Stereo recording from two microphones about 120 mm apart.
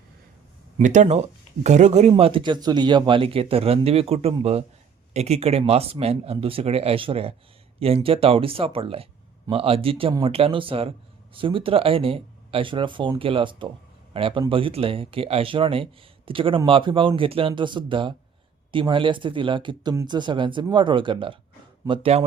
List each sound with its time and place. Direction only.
0.8 s speech: 90° right
1.6 s speech: 75° right (ahead or behind); by 22.2 s 50° right (ahead or behind)